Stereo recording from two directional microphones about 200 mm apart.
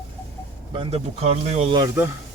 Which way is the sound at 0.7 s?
30° right (ahead or behind).